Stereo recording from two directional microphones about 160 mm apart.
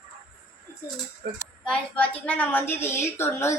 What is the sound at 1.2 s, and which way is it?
Speech, 85° right.